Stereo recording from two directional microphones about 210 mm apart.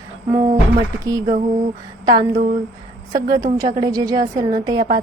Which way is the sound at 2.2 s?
40° right (ahead or behind).